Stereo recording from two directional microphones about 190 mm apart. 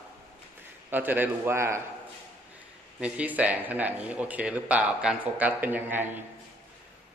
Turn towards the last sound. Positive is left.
turn(degrees=-10)  # may be behind; listen again after turning